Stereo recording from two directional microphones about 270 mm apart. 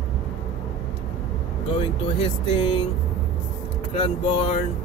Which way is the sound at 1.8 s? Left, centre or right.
Centre.